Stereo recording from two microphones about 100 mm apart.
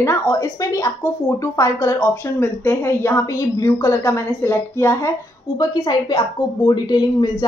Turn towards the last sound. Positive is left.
turn(degrees=45)  # may be behind; listen again after turning